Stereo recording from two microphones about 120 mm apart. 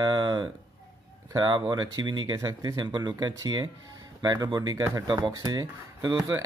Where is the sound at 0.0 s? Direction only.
35° right (ahead or behind).